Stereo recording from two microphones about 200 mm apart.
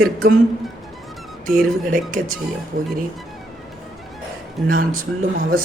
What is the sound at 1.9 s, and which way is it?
Speech, 40° right (ahead or behind).